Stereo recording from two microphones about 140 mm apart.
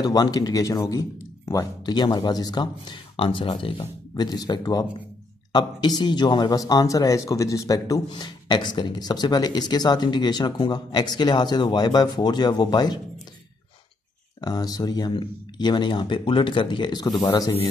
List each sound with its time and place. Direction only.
0.0 s a man's voice: 30° left (ahead or behind)
14.4 s a man's voice: 25° left (ahead or behind)